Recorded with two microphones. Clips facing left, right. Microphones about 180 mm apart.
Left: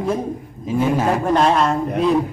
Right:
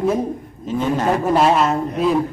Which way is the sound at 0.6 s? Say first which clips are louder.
Left 1 dB; 5° left (ahead or behind).